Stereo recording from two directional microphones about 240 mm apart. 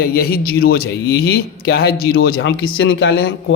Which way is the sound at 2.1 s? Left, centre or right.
Left.